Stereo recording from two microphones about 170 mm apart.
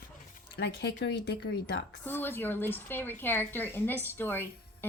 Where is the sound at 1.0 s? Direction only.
90° left.